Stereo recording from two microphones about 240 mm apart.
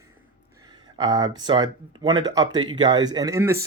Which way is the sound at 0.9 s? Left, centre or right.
Centre.